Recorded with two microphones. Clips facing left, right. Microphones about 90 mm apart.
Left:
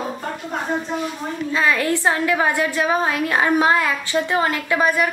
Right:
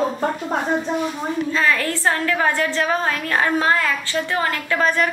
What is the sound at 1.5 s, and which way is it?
A woman's voice, 20° left (ahead or behind).